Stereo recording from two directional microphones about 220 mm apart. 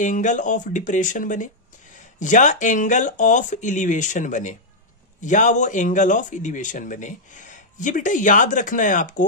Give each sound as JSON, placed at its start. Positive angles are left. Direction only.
{"t": 0.0, "sound": "speech", "side_deg": 35}